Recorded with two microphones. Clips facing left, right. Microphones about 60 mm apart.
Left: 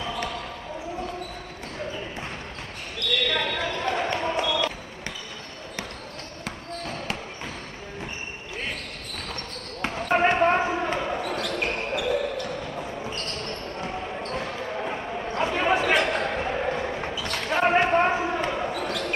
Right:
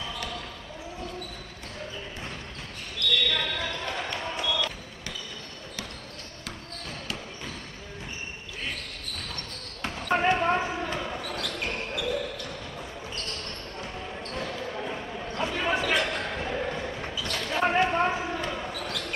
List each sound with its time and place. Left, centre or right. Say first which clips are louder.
3.3 s basketball bounce: left 3 dB; left
9.8 s basketball bounce: left 4 dB; left
14.1 s basketball bounce: left 4 dB; left